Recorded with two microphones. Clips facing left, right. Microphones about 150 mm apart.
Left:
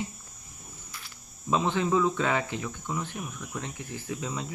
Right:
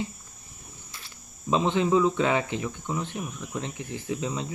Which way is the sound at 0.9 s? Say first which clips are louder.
Even; 25° right (ahead or behind).